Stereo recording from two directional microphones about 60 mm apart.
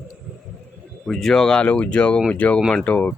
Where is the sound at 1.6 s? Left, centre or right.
Left.